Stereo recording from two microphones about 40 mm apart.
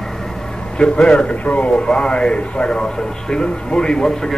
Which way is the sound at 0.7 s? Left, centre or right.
Left.